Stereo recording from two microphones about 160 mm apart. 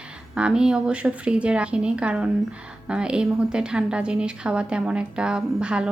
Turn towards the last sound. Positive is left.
turn(degrees=-5)  # may be behind; listen again after turning